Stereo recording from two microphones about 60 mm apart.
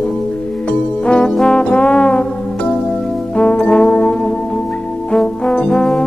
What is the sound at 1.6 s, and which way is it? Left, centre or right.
Trombone, centre.